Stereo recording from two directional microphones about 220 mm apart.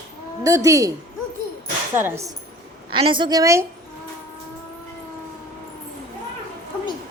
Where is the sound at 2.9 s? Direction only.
20° right (ahead or behind).